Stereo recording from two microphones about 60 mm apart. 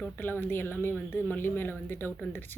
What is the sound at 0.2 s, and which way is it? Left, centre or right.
Speech, left.